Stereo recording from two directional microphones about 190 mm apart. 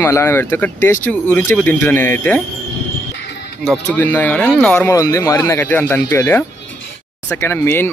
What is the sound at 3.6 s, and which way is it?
Speech, 5° left (ahead or behind).